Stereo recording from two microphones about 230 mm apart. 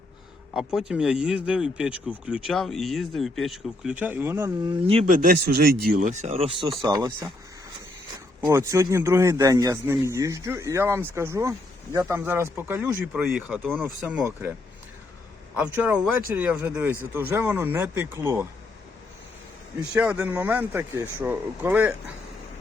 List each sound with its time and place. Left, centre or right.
0.5 s speech: centre; by 5.0 s right
5.0 s speech: right; by 7.3 s centre
8.4 s speech: centre
15.5 s speech: centre
19.9 s speech: centre